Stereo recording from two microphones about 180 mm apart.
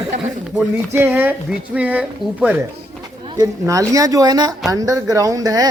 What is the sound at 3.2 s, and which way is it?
Speech, 20° right (ahead or behind).